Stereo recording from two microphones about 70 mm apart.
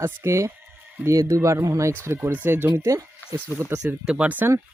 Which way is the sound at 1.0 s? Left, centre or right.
Right.